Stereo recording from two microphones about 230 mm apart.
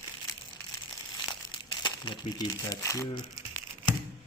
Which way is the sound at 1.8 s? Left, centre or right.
Centre.